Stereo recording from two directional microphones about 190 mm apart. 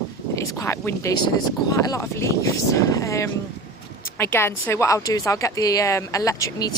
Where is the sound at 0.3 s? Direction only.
15° left (ahead or behind).